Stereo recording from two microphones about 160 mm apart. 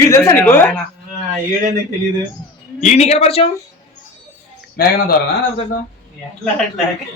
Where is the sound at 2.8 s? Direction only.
45° left (ahead or behind).